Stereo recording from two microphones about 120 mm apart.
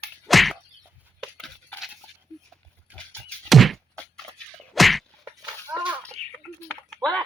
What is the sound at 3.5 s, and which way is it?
Thunk, centre (ahead or behind).